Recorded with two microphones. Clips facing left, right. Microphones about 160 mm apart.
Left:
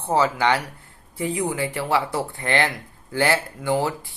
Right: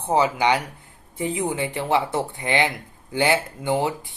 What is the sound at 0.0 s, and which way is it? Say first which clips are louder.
Speech: even; 15° right (ahead or behind).